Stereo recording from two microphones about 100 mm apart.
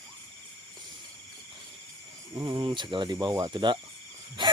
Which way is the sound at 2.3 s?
40° right (ahead or behind).